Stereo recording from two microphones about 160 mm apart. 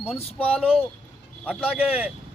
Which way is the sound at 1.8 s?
5° right (ahead or behind).